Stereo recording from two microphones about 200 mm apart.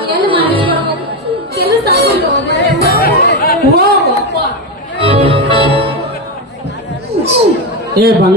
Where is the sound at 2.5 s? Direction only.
60° left (ahead or behind).